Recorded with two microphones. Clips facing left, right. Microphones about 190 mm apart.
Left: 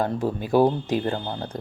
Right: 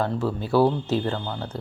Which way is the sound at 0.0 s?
15° left (ahead or behind).